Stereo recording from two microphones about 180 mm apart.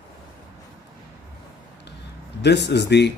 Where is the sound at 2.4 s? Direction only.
70° left (ahead or behind).